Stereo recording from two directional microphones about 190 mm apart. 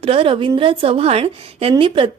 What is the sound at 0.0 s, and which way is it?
A woman's voice, 30° right (ahead or behind).